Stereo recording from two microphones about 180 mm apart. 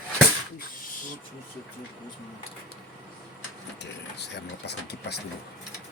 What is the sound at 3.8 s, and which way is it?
Speech, 70° left (ahead or behind).